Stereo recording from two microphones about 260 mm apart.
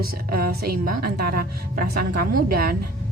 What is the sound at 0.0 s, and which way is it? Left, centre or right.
A woman's voice, right.